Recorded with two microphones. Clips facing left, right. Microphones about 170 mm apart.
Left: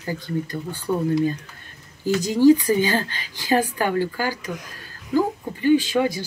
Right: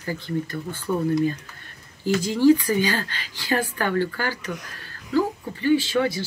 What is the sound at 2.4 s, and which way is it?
Speech, 15° left (ahead or behind).